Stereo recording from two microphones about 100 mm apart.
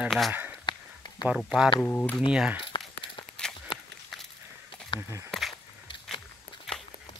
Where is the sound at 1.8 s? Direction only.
15° left (ahead or behind).